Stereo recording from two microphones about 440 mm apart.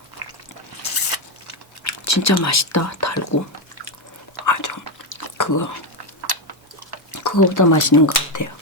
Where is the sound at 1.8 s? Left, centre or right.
Left.